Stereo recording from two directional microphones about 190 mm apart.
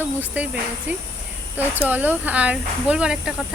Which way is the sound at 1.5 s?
10° right (ahead or behind).